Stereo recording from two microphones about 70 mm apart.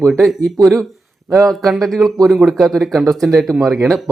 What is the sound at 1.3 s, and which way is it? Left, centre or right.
Speech, centre.